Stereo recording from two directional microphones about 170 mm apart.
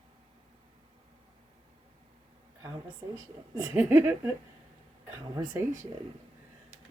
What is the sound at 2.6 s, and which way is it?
A woman's voice, 15° right (ahead or behind).